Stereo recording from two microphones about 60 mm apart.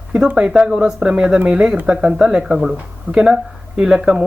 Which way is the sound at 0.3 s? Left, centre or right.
Centre.